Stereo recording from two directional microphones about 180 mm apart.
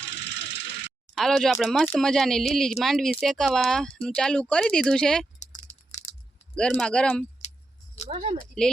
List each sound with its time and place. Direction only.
0.0 s a sound: 75° left (ahead or behind)
1.1 s speech: centre (ahead or behind)
6.6 s speech: 5° left (ahead or behind)
8.1 s speech: 30° right (ahead or behind)
8.6 s speech: 5° left (ahead or behind)